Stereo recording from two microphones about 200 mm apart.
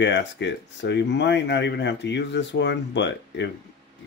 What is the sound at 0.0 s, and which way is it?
Speech, 60° left (ahead or behind).